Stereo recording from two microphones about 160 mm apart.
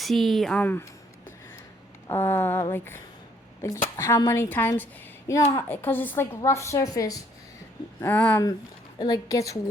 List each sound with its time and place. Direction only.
0.0 s speech: centre (ahead or behind)
2.0 s a woman's voice: 15° left (ahead or behind)
8.0 s a woman's voice: 10° left (ahead or behind)
9.0 s a woman's voice: 25° left (ahead or behind)